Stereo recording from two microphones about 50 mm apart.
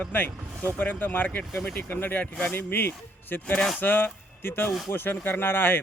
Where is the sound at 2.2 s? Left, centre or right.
Left.